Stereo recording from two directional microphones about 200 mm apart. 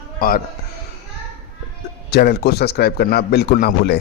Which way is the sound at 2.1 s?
55° left (ahead or behind).